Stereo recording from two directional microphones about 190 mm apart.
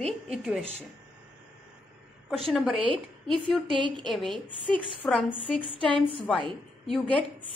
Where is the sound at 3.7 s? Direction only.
25° right (ahead or behind).